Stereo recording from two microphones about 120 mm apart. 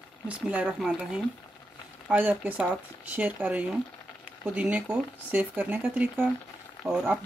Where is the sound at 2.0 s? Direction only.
15° right (ahead or behind).